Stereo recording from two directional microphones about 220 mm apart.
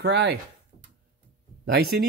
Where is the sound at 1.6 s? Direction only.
45° right (ahead or behind).